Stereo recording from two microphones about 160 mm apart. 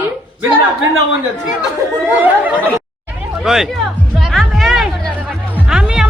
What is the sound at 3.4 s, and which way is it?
Speech, 5° right (ahead or behind).